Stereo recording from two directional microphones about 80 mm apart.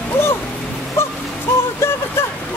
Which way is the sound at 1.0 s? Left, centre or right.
Left.